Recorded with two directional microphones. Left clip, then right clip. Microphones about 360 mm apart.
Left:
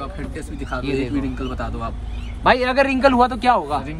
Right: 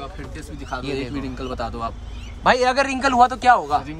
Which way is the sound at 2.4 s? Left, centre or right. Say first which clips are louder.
Left 1 dB; centre.